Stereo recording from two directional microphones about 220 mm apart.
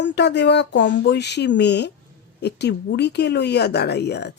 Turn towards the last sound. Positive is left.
turn(degrees=50)  # may be behind; listen again after turning